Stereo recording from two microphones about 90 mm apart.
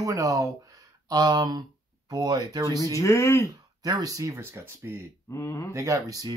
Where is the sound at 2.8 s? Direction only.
35° left (ahead or behind).